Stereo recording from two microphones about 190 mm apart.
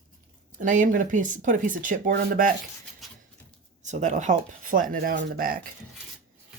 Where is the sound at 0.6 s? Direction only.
40° right (ahead or behind).